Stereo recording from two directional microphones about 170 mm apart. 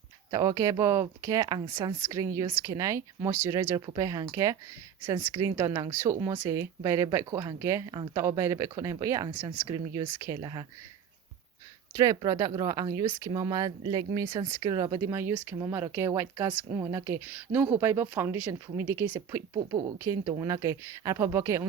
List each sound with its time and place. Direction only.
0.3 s speech: 20° right (ahead or behind)
11.9 s speech: 25° right (ahead or behind)